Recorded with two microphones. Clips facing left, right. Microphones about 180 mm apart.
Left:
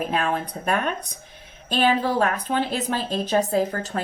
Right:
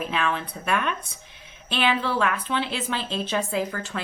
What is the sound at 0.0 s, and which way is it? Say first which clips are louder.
Speech: left 3 dB; 40° left (ahead or behind).